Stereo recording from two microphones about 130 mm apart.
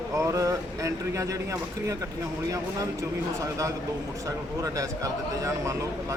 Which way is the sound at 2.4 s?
25° right (ahead or behind).